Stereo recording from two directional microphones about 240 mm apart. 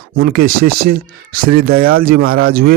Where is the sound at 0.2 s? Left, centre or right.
Right.